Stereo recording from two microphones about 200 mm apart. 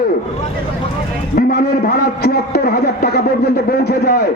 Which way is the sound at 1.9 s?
50° left (ahead or behind).